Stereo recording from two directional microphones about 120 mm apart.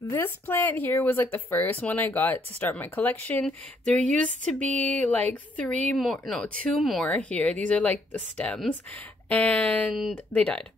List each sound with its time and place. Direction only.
0.1 s speech: 20° left (ahead or behind)
5.9 s speech: centre (ahead or behind)
7.1 s speech: 10° left (ahead or behind)